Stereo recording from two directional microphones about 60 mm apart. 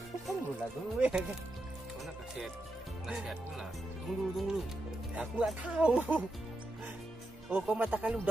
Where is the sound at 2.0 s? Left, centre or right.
Centre.